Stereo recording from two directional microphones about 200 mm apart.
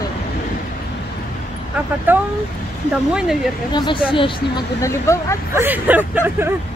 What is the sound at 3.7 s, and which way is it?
Speech, 25° left (ahead or behind).